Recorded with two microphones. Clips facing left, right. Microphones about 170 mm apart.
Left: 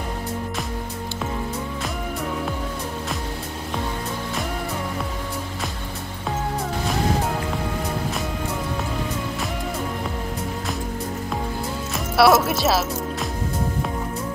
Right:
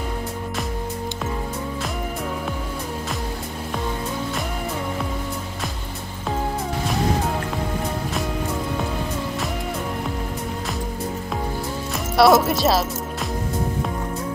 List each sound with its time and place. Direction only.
12.2 s speech: centre (ahead or behind)